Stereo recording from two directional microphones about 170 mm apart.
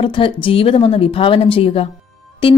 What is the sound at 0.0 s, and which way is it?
A woman's voice, 30° left (ahead or behind).